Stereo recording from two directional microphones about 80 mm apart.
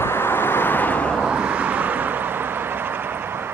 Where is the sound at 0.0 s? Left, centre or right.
Left.